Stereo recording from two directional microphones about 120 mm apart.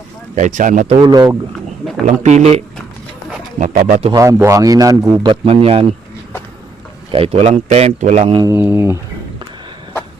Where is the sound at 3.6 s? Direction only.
90° right.